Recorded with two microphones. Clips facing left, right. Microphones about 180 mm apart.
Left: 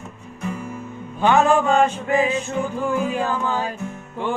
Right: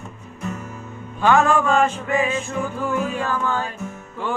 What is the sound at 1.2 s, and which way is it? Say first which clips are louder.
Music: left 1 dB; 20° left (ahead or behind).